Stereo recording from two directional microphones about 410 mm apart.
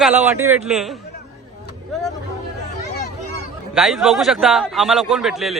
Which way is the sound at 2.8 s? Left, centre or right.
Left.